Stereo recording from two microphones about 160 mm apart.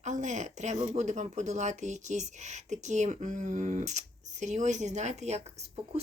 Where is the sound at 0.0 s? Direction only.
45° right (ahead or behind).